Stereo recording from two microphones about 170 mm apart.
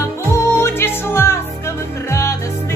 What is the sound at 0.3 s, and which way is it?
Music, 15° left (ahead or behind).